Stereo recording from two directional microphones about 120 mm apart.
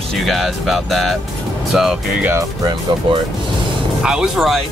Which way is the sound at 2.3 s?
25° right (ahead or behind).